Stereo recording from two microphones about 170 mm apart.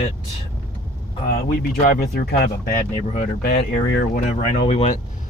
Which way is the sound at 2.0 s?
65° left (ahead or behind).